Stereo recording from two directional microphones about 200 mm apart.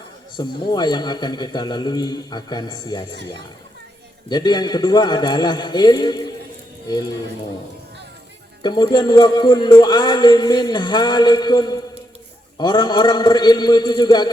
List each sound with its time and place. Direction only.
0.3 s speech: 20° left (ahead or behind)
4.3 s speech: 20° left (ahead or behind)
8.6 s speech: 20° left (ahead or behind)